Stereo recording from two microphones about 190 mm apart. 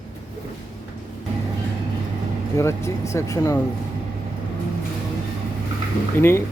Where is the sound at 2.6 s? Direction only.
15° left (ahead or behind).